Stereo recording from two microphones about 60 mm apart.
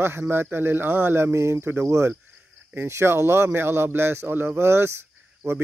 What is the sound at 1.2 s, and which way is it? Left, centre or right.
Speech, right.